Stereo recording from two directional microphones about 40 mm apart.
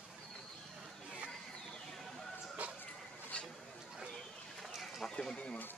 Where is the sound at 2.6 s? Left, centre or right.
Right.